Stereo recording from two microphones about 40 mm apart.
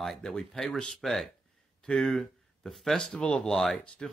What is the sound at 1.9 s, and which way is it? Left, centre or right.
Speech, left.